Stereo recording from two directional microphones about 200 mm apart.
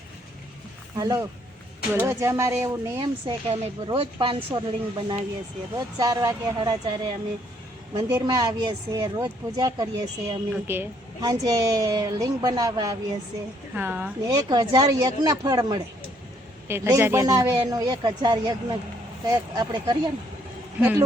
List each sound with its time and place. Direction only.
0.9 s a woman's voice: 20° right (ahead or behind)
13.7 s a woman's voice: 10° right (ahead or behind)
14.3 s a woman's voice: 20° right (ahead or behind)